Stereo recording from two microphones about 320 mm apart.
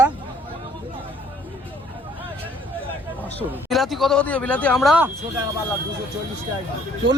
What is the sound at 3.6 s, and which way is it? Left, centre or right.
Speech, centre.